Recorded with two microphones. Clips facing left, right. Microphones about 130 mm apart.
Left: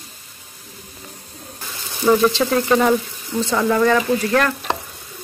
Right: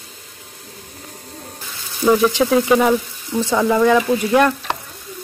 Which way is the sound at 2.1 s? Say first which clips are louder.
Right 2 dB; 10° right (ahead or behind).